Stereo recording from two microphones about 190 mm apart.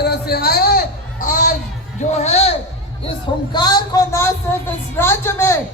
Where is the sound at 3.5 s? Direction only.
20° left (ahead or behind).